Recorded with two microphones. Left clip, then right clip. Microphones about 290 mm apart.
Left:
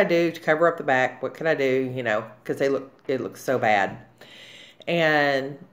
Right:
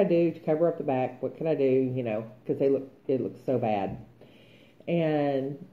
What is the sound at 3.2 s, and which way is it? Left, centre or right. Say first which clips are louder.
Speech: left 4 dB; left.